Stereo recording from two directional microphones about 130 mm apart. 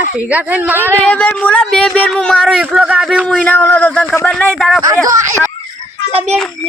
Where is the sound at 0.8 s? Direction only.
10° left (ahead or behind).